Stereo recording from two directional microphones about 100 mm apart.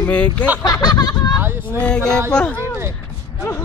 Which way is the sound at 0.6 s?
40° left (ahead or behind).